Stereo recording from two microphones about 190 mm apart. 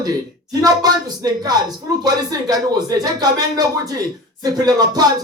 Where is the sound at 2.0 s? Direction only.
20° right (ahead or behind).